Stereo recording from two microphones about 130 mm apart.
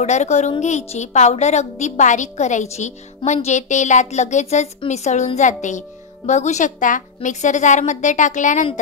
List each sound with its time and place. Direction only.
0.0 s a woman's voice: 60° left (ahead or behind)